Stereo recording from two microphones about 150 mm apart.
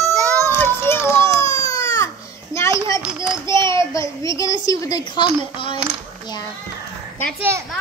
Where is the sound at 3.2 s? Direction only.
30° right (ahead or behind).